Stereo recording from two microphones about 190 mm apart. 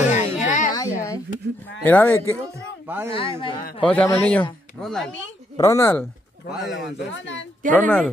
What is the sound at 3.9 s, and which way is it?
Speech, 10° left (ahead or behind).